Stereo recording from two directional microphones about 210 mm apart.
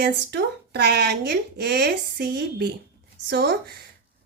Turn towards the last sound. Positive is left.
turn(degrees=-50)  # may be behind; listen again after turning